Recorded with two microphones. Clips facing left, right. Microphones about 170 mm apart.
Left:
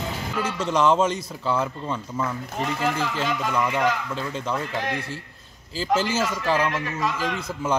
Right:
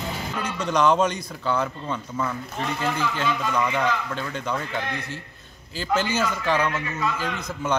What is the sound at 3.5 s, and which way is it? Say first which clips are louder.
A man's voice: left 3 dB; 5° left (ahead or behind).